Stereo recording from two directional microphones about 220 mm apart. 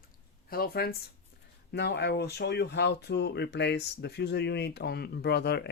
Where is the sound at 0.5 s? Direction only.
45° left (ahead or behind).